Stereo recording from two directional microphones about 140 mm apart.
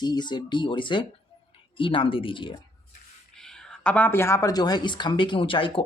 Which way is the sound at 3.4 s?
5° left (ahead or behind).